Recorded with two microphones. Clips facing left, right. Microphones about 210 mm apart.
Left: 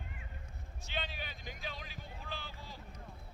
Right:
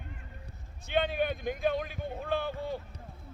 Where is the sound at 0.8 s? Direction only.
55° right (ahead or behind).